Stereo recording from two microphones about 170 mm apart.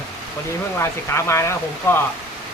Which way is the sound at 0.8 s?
15° left (ahead or behind).